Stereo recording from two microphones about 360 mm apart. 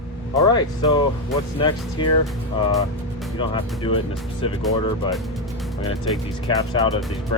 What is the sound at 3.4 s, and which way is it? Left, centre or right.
Speech, centre.